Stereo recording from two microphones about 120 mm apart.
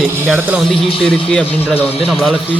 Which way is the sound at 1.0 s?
5° left (ahead or behind).